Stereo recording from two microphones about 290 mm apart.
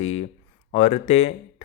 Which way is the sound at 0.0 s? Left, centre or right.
Left.